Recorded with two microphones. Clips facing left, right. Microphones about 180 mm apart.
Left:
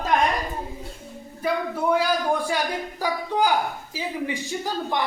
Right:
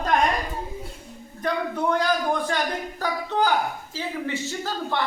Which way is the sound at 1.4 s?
5° left (ahead or behind).